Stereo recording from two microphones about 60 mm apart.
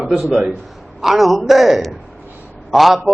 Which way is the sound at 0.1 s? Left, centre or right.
Centre.